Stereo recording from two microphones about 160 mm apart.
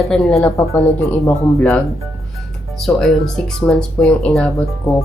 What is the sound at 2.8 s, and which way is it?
A woman's voice, centre (ahead or behind).